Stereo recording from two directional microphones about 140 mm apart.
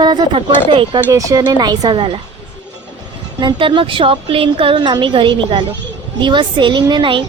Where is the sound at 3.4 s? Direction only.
35° right (ahead or behind).